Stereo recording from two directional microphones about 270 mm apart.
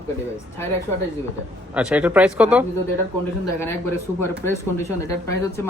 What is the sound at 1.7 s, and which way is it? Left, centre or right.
Speech, centre.